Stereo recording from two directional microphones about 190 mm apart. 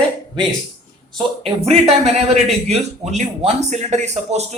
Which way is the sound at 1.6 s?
35° right (ahead or behind).